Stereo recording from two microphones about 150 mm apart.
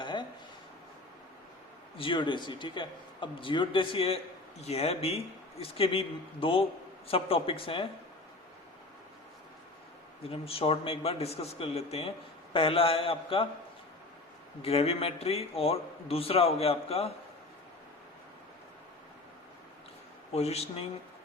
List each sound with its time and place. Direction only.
0.0 s a sound: 30° left (ahead or behind)
2.0 s a man's voice: 35° left (ahead or behind)
10.2 s a man's voice: 40° left (ahead or behind)
14.6 s a man's voice: 45° left (ahead or behind)
20.3 s speech: 45° left (ahead or behind)